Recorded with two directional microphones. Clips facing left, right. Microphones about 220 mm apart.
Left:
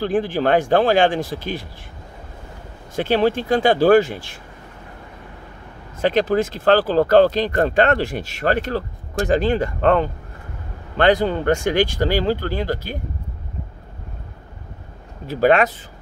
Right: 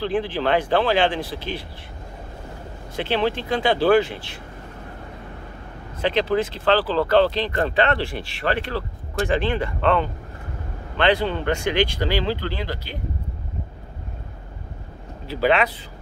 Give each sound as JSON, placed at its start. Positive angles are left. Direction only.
{"t": 0.0, "sound": "speech", "side_deg": 45}
{"t": 3.0, "sound": "speech", "side_deg": 45}
{"t": 5.9, "sound": "speech", "side_deg": 45}
{"t": 15.2, "sound": "speech", "side_deg": 45}